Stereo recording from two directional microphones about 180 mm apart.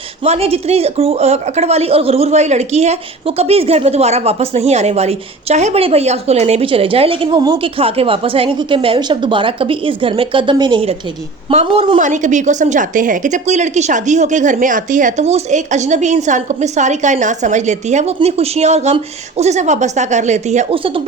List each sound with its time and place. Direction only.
0.3 s a woman's voice: 35° right (ahead or behind)
11.9 s a woman's voice: 45° right (ahead or behind)